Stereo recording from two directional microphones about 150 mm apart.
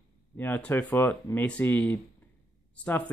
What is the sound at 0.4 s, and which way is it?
Speech, 10° left (ahead or behind).